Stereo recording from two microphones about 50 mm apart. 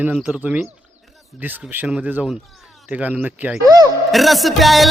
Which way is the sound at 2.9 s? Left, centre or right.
Right.